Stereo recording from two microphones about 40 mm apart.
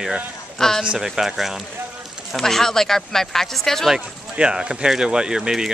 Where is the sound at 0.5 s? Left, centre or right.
Centre.